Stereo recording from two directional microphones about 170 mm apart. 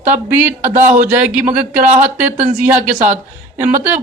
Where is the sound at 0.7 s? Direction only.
50° right (ahead or behind).